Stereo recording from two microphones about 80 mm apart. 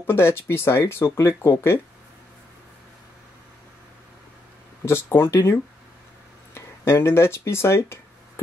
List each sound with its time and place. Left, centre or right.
0.0 s speech: left
4.8 s speech: left